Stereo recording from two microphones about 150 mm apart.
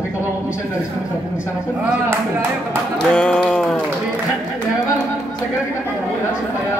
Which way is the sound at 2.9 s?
5° left (ahead or behind).